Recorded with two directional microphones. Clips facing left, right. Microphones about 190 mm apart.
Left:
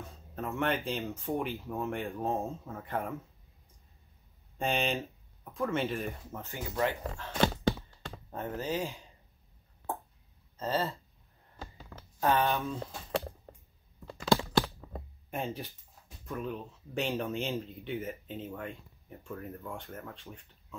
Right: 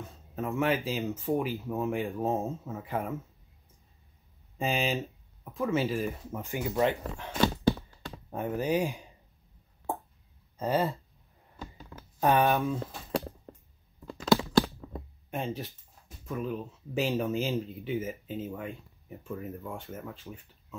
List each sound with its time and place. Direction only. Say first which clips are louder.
0.4 s speech: right 3 dB; centre (ahead or behind)
4.6 s speech: right 1 dB; 5° right (ahead or behind)
10.6 s speech: right 4 dB; 15° right (ahead or behind)
12.2 s speech: right 4 dB; 15° right (ahead or behind)
15.3 s speech: right 2 dB; centre (ahead or behind)